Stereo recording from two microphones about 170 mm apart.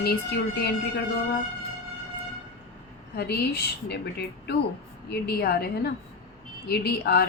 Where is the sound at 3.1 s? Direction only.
70° left (ahead or behind).